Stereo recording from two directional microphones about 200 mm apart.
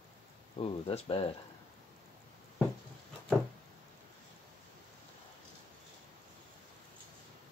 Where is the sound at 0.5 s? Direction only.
30° left (ahead or behind).